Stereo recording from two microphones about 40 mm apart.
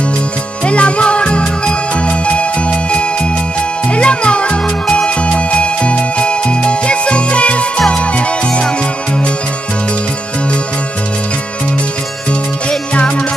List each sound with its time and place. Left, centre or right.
0.7 s music: left